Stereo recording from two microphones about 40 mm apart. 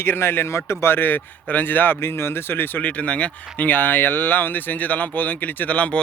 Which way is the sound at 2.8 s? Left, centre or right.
Left.